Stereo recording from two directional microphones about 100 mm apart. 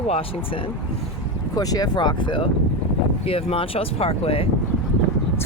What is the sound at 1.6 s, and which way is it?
Speech, 40° left (ahead or behind).